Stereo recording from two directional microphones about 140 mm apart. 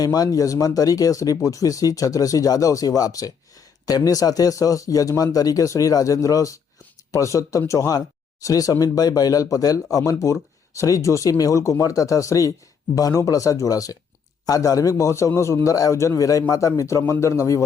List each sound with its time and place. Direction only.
0.0 s speech: 25° left (ahead or behind)